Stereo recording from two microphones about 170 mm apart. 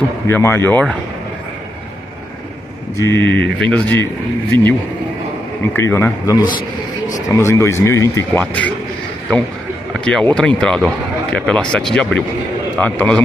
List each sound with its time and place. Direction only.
0.3 s speech: 15° left (ahead or behind)
3.0 s speech: 15° left (ahead or behind)
9.9 s speech: 5° left (ahead or behind)